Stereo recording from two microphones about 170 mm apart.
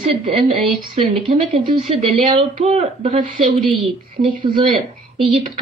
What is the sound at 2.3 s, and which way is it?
Speech, 35° right (ahead or behind).